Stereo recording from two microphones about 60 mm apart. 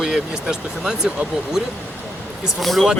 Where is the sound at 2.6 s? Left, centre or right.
Centre.